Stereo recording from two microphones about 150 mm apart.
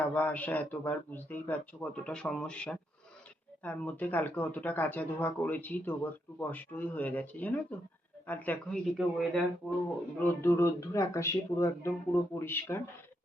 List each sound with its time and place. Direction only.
0.1 s speech: 10° left (ahead or behind)
9.0 s speech: centre (ahead or behind)
10.4 s speech: 20° left (ahead or behind)